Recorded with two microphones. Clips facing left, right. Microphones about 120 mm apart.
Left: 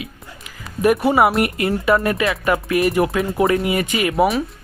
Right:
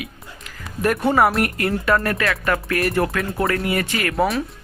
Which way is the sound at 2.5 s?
15° left (ahead or behind).